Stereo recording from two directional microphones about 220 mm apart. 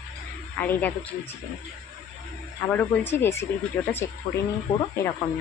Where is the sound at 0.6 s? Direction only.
10° left (ahead or behind).